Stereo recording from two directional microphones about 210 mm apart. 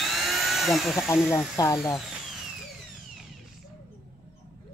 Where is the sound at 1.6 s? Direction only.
15° left (ahead or behind).